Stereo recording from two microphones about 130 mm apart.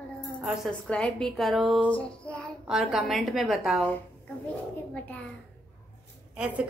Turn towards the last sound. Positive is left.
turn(degrees=-10)  # may be behind; listen again after turning